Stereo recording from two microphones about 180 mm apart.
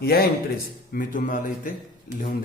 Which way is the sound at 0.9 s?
50° left (ahead or behind).